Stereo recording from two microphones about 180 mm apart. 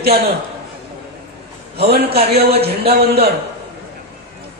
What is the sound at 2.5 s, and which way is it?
Speech, 35° right (ahead or behind).